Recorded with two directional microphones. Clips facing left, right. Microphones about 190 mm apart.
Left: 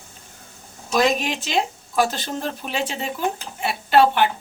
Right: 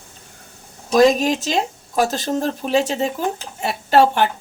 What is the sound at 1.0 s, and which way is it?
Speech, 40° right (ahead or behind).